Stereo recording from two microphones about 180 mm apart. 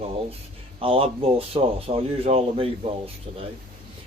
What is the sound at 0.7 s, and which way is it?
Speech, 30° right (ahead or behind).